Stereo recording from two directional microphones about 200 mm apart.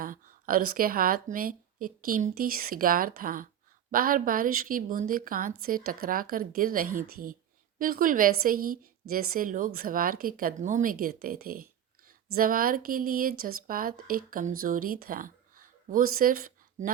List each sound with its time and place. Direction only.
0.0 s a woman's voice: 45° right (ahead or behind)